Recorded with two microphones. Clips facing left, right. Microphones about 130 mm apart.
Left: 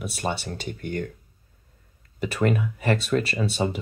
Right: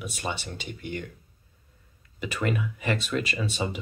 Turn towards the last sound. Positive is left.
turn(degrees=40)  # may be behind; listen again after turning